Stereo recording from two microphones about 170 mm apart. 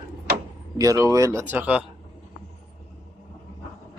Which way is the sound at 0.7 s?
20° right (ahead or behind).